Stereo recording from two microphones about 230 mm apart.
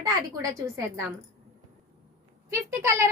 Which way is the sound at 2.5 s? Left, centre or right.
Centre.